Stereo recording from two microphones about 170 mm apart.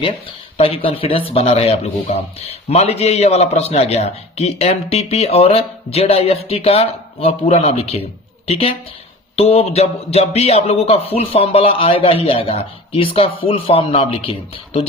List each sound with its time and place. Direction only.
0.5 s speech: 35° left (ahead or behind)